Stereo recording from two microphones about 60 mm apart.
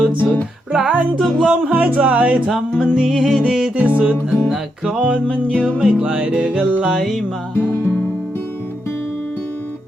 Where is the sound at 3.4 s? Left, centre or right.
Centre.